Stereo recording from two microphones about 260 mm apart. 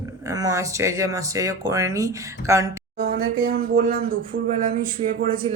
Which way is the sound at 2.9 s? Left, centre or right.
Right.